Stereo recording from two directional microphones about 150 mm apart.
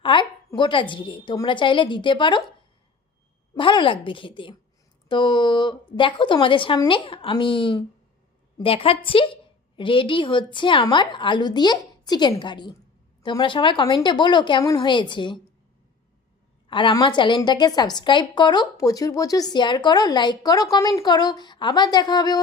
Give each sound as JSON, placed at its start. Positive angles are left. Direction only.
{"t": 0.0, "sound": "a woman's voice", "side_deg": 30}
{"t": 3.5, "sound": "a woman's voice", "side_deg": 35}
{"t": 16.6, "sound": "a woman's voice", "side_deg": 35}